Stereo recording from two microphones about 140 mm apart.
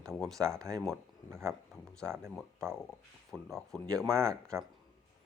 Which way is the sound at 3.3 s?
5° left (ahead or behind).